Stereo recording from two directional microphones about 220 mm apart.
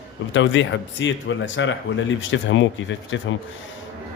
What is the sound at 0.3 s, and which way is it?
Speech, 55° left (ahead or behind).